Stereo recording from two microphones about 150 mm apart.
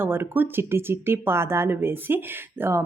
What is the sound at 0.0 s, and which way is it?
Speech, 15° right (ahead or behind).